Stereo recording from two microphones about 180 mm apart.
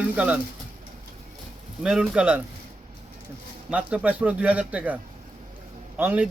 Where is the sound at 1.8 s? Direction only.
5° right (ahead or behind).